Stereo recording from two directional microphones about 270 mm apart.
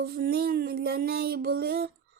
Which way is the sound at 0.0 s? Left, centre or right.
Right.